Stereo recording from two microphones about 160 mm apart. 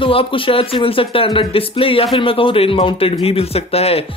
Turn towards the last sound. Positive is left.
turn(degrees=40)  # may be behind; listen again after turning